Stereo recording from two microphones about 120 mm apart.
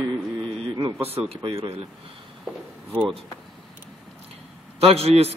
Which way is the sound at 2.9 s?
5° right (ahead or behind).